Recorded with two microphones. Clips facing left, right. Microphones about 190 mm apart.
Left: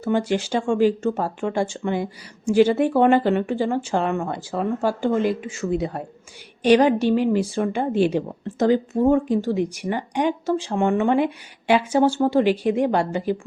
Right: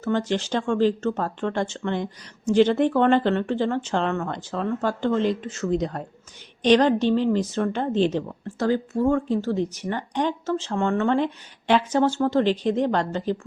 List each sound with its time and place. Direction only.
0.0 s speech: 10° left (ahead or behind)